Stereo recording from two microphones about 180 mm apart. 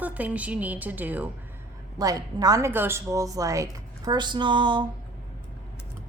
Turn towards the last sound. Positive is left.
turn(degrees=-25)  # may be behind; listen again after turning